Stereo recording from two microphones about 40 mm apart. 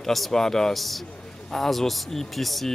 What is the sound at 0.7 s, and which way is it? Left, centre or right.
Speech, centre.